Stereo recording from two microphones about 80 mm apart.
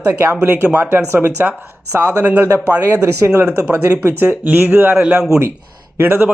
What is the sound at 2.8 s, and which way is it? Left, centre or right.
Speech, right.